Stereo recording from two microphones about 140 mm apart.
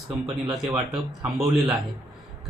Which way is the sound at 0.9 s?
Centre (ahead or behind).